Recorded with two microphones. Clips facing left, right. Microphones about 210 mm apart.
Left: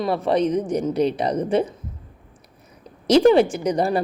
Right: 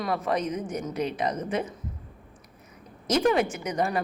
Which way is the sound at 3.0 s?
30° left (ahead or behind).